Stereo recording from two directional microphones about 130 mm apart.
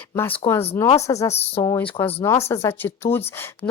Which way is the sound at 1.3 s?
50° left (ahead or behind).